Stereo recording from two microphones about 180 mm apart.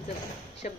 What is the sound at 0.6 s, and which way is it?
Speech, 45° left (ahead or behind).